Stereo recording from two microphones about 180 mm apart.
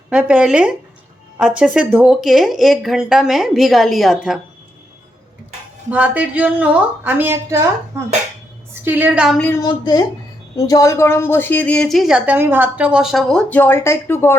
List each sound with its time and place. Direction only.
0.1 s a woman's voice: 5° right (ahead or behind)
5.9 s a woman's voice: 10° right (ahead or behind)
9.6 s a woman's voice: 25° left (ahead or behind)